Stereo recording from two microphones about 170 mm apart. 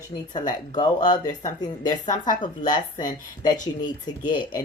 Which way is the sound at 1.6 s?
25° left (ahead or behind).